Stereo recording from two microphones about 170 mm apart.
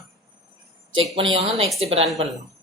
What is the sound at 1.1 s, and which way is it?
Speech, 35° right (ahead or behind).